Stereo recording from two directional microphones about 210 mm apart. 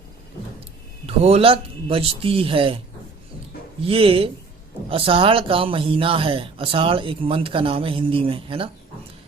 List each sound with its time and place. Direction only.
1.0 s speech: 30° right (ahead or behind)
3.8 s speech: 25° right (ahead or behind)